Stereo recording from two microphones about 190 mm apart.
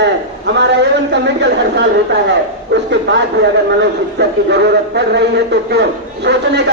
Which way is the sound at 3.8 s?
60° right (ahead or behind).